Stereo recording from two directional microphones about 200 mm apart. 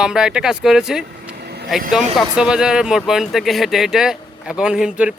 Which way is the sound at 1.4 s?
55° right (ahead or behind).